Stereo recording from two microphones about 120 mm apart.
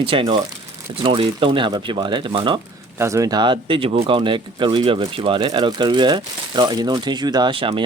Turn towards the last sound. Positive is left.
turn(degrees=-45)  # may be behind; listen again after turning